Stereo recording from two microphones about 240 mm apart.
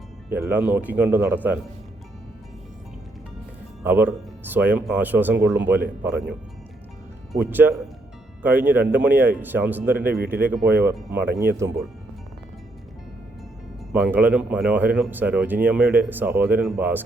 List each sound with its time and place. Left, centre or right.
0.3 s speech: centre
3.8 s speech: centre
7.3 s speech: centre
13.9 s speech: centre